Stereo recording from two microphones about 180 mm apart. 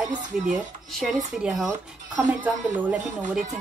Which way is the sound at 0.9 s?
Centre (ahead or behind).